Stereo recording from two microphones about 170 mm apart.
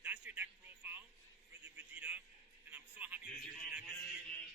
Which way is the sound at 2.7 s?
10° right (ahead or behind).